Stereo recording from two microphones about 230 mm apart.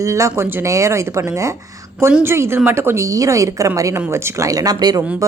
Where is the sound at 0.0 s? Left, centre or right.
Centre.